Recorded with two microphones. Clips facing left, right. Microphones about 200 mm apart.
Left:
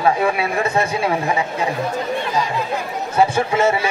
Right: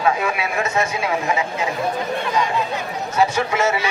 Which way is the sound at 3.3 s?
30° left (ahead or behind).